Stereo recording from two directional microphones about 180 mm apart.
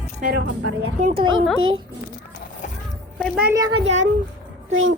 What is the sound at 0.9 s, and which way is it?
Speech, 40° right (ahead or behind).